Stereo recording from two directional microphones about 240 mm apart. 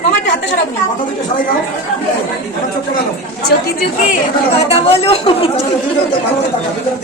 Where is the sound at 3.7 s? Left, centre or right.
Left.